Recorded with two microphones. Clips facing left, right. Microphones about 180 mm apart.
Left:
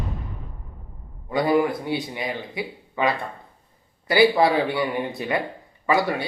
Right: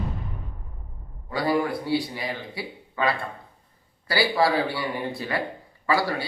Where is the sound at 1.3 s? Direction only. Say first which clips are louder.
Left 4 dB; 20° left (ahead or behind).